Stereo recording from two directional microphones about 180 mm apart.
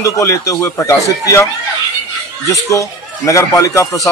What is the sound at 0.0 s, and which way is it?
Speech, 15° left (ahead or behind).